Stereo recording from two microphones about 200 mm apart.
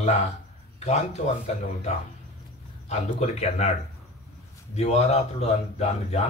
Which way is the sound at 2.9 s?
30° left (ahead or behind).